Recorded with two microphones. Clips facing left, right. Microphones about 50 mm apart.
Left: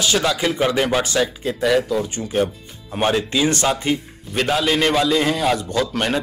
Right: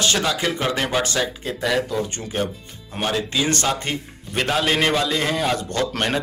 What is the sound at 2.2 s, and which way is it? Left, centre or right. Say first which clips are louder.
Speech: left 5 dB; centre.